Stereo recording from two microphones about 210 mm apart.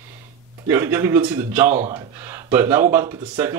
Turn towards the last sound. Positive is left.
turn(degrees=-10)  # may be behind; listen again after turning